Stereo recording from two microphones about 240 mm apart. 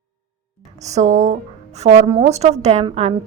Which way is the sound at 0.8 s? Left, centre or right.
Right.